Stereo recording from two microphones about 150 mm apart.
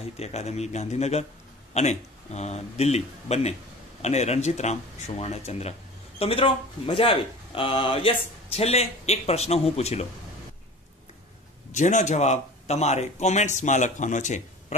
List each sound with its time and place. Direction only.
0.2 s speech: 45° left (ahead or behind)
11.7 s speech: 55° left (ahead or behind)